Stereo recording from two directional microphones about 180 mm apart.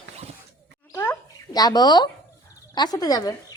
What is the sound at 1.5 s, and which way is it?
A child's voice, 20° left (ahead or behind).